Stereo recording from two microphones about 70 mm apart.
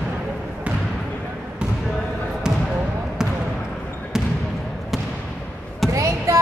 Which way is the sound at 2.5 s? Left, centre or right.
Centre.